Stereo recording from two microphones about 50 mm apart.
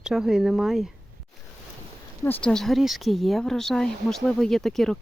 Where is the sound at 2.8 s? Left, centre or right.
Centre.